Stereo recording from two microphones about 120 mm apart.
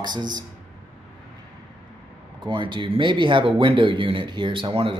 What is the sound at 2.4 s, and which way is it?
Speech, 40° right (ahead or behind).